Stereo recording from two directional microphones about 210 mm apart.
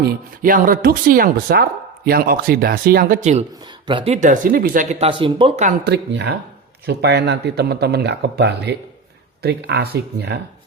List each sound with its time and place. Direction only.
0.0 s speech: 40° right (ahead or behind)
3.5 s speech: 20° right (ahead or behind)
5.8 s speech: 55° right (ahead or behind)